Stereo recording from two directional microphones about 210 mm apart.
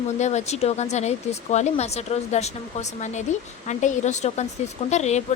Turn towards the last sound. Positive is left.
turn(degrees=30)  # may be behind; listen again after turning